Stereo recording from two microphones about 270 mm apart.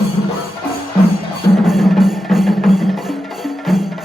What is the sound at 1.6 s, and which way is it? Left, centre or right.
Music, centre.